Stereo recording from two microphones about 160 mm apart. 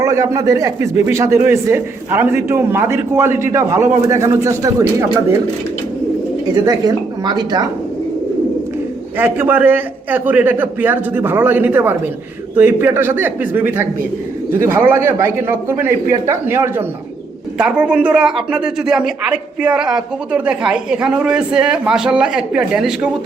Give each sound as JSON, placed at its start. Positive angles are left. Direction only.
{"t": 0.0, "sound": "a man's voice", "side_deg": -20}
{"t": 6.5, "sound": "a man's voice", "side_deg": -25}
{"t": 9.1, "sound": "a man's voice", "side_deg": -15}